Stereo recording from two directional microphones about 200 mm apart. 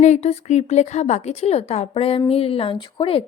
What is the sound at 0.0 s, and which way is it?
A woman's voice, 35° left (ahead or behind).